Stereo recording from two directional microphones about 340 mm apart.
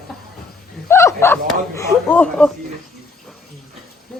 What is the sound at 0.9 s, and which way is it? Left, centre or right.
Speech, centre.